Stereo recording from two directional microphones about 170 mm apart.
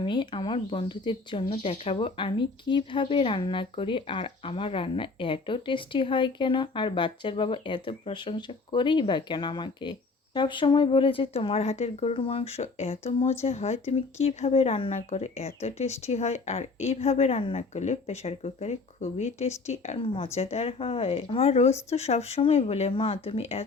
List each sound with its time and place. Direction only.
0.0 s speech: 25° left (ahead or behind)